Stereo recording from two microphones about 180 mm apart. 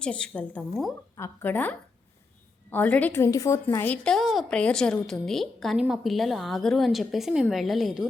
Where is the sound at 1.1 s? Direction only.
10° left (ahead or behind).